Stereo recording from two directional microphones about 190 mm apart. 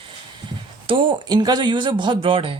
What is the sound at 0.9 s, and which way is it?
A woman's voice, 25° right (ahead or behind).